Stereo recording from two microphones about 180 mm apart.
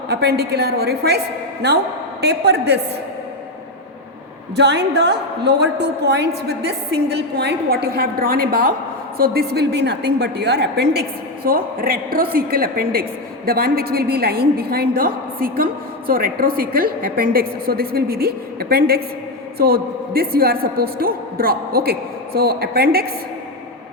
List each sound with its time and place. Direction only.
0.1 s a woman's voice: 65° right (ahead or behind)
4.5 s a woman's voice: 70° right (ahead or behind)
11.4 s a woman's voice: 55° right (ahead or behind)